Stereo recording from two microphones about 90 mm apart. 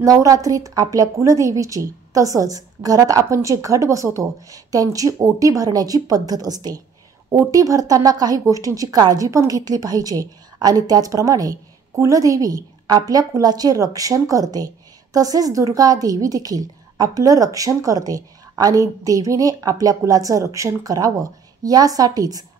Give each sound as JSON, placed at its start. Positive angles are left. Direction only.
{"t": 0.0, "sound": "a woman's voice", "side_deg": -40}